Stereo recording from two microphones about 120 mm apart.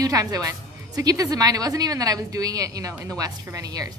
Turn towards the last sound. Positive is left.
turn(degrees=-30)  # may be behind; listen again after turning